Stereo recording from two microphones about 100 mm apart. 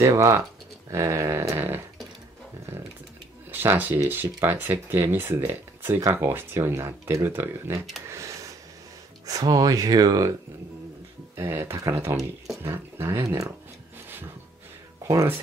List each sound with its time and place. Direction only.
0.0 s speech: 30° right (ahead or behind)
3.5 s speech: 20° right (ahead or behind)
8.1 s a sound: 30° right (ahead or behind)
9.2 s speech: 40° right (ahead or behind)
11.3 s speech: 25° right (ahead or behind)